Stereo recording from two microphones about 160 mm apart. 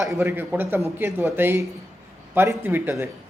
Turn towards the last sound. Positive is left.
turn(degrees=-15)  # may be behind; listen again after turning